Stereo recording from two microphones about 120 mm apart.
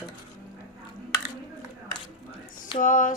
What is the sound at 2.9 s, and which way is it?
Female singing, 90° left.